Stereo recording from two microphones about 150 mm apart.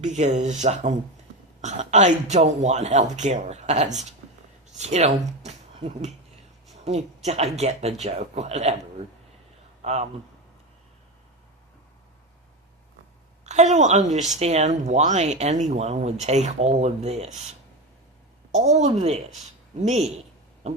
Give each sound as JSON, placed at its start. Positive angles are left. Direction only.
{"t": 0.0, "sound": "a woman's voice", "side_deg": -50}
{"t": 7.3, "sound": "a woman's voice", "side_deg": -45}
{"t": 9.8, "sound": "speech", "side_deg": -45}
{"t": 13.4, "sound": "a woman's voice", "side_deg": -50}
{"t": 18.5, "sound": "a woman's voice", "side_deg": -50}
{"t": 20.6, "sound": "a sound", "side_deg": -45}